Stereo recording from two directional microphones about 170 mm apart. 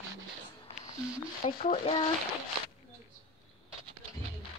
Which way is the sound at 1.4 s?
35° left (ahead or behind).